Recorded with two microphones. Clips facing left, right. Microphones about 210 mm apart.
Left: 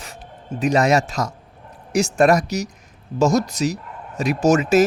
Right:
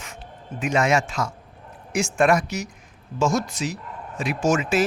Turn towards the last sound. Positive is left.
turn(degrees=40)  # may be behind; listen again after turning